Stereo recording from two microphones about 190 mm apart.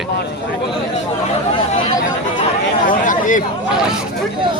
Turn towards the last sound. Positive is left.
turn(degrees=45)  # may be behind; listen again after turning